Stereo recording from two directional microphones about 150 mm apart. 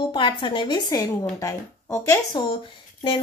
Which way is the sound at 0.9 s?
20° left (ahead or behind).